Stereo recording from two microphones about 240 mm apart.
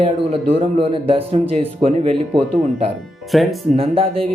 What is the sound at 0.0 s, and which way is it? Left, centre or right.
A man's voice, right.